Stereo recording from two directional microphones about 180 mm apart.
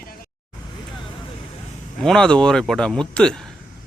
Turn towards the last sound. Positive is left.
turn(degrees=5)  # may be behind; listen again after turning